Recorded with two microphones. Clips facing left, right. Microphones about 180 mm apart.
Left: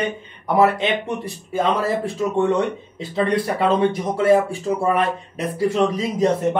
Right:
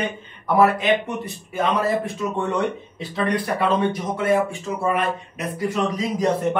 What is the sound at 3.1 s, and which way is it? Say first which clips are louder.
Speech: left 3 dB; 30° left (ahead or behind).